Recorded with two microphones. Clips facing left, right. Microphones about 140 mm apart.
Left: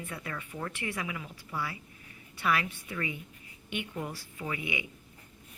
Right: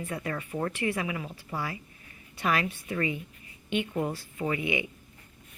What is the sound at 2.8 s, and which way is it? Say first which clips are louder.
Speech: right 6 dB; 35° right (ahead or behind).